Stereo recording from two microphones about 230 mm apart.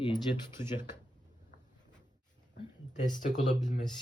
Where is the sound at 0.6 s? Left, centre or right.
Left.